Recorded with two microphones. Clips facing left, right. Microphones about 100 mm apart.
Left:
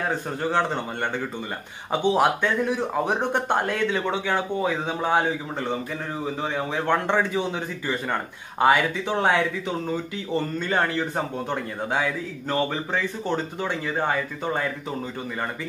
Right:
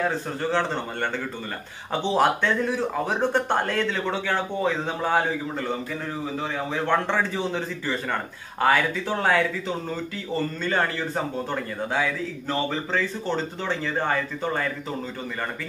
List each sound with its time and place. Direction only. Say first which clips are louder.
0.1 s a man's voice: left 1 dB; 15° left (ahead or behind)
11.9 s a man's voice: even; 15° left (ahead or behind)